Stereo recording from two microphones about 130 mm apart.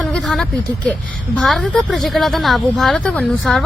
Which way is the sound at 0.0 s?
5° left (ahead or behind).